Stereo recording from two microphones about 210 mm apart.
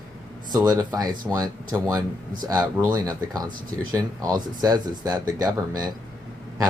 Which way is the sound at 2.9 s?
20° right (ahead or behind).